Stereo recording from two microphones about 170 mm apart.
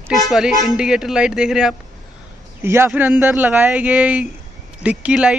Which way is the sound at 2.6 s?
15° right (ahead or behind).